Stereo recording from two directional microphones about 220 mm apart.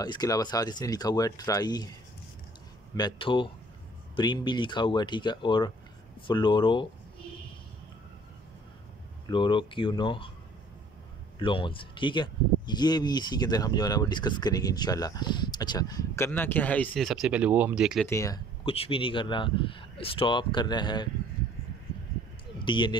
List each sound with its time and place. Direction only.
0.0 s speech: 20° left (ahead or behind)
3.0 s speech: 20° left (ahead or behind)
9.3 s speech: 20° left (ahead or behind)
11.3 s speech: 25° left (ahead or behind); by 18.0 s 5° right (ahead or behind)
18.0 s speech: 15° left (ahead or behind)
18.7 s speech: 25° left (ahead or behind)
22.6 s speech: 20° left (ahead or behind)